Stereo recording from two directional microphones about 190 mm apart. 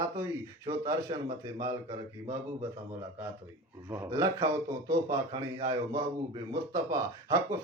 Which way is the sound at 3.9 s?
15° right (ahead or behind).